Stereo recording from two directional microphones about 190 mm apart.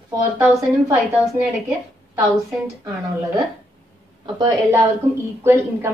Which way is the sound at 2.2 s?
15° right (ahead or behind).